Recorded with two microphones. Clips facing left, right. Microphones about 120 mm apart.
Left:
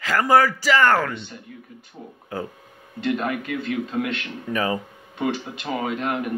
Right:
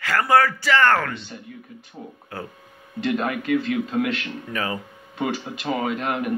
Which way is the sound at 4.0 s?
25° left (ahead or behind).